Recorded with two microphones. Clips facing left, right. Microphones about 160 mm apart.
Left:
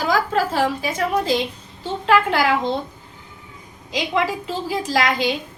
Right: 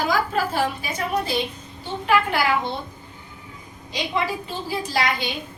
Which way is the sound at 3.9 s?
90° left.